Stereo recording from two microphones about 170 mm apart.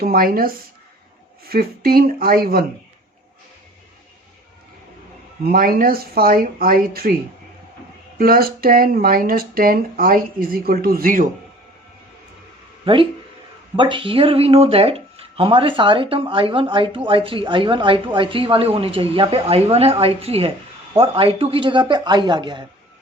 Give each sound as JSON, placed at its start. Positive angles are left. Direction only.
{"t": 0.0, "sound": "speech", "side_deg": -60}
{"t": 5.5, "sound": "speech", "side_deg": -60}
{"t": 8.2, "sound": "speech", "side_deg": -60}
{"t": 12.8, "sound": "speech", "side_deg": -30}